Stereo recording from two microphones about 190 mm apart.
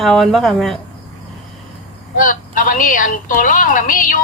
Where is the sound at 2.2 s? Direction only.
45° left (ahead or behind).